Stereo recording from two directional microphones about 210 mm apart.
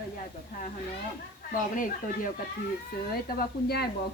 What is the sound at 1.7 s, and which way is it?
Speech, 40° left (ahead or behind).